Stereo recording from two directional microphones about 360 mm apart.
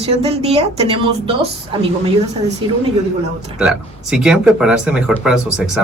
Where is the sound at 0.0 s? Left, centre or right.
Centre.